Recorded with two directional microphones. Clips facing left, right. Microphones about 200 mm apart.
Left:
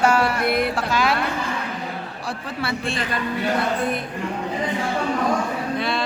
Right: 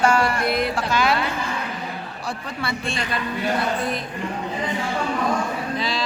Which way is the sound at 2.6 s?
5° left (ahead or behind).